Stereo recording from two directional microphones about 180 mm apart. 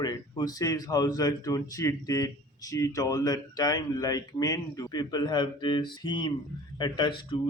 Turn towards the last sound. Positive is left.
turn(degrees=25)  # may be behind; listen again after turning